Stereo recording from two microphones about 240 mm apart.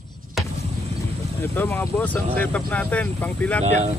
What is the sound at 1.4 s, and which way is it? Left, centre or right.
Speech, centre.